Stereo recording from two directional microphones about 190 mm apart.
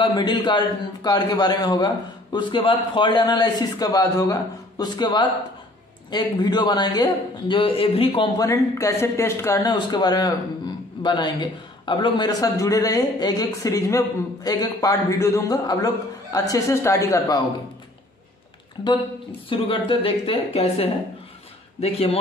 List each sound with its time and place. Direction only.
0.0 s a man's voice: 25° left (ahead or behind)
8.4 s a man's voice: 15° left (ahead or behind)
18.8 s a man's voice: 20° left (ahead or behind)